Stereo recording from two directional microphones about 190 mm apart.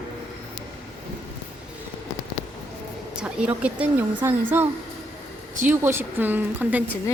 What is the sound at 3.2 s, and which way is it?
Speech, 5° right (ahead or behind).